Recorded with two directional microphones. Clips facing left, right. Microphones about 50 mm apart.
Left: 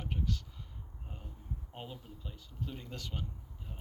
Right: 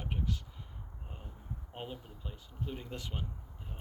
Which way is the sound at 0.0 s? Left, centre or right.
Centre.